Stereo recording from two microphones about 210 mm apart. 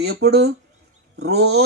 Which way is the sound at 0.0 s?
50° right (ahead or behind).